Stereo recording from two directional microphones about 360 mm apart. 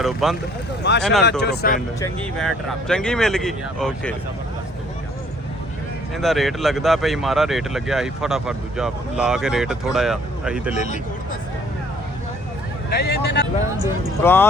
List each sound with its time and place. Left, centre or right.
0.0 s speech: centre
0.8 s speech: left
2.0 s speech: centre
6.1 s speech: centre
10.8 s speech: centre
13.1 s speech: left
14.2 s speech: centre